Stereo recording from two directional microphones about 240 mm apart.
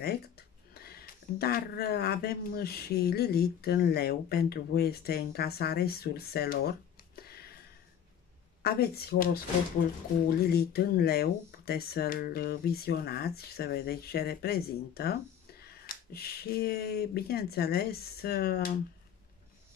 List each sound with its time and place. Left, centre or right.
0.0 s speech: left
7.2 s a sound: left
8.6 s speech: left
10.4 s speech: left